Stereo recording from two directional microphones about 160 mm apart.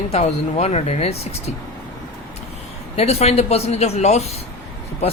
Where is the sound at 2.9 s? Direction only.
40° left (ahead or behind).